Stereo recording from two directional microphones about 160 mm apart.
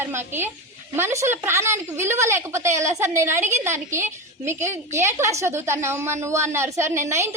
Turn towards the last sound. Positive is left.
turn(degrees=-15)  # may be behind; listen again after turning